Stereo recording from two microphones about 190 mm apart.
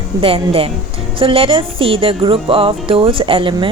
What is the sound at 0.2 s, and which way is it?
A woman's voice, 30° right (ahead or behind).